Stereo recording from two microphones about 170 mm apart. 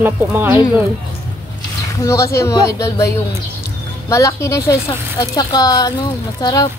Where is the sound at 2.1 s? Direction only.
15° left (ahead or behind).